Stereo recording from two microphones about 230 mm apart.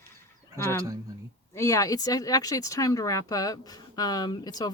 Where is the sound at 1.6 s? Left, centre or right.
Centre.